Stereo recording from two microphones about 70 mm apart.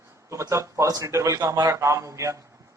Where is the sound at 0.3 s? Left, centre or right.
Right.